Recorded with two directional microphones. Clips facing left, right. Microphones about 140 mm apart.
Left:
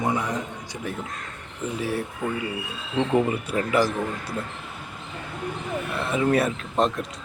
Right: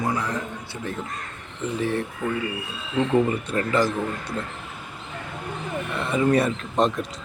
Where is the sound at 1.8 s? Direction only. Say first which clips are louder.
Right 3 dB; 10° left (ahead or behind).